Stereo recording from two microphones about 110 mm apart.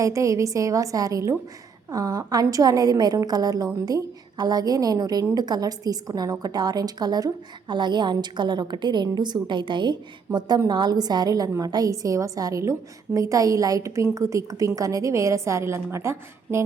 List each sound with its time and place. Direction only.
0.0 s a woman's voice: 30° right (ahead or behind); by 9.9 s 45° right (ahead or behind)
10.3 s a woman's voice: 30° right (ahead or behind)